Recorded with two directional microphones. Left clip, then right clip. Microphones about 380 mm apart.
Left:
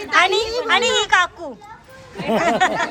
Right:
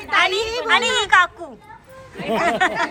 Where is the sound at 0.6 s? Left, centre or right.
Centre.